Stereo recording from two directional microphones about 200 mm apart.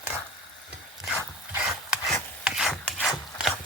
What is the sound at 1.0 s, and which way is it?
Dog, centre (ahead or behind).